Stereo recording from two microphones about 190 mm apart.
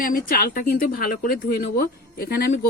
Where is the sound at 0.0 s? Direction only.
50° left (ahead or behind).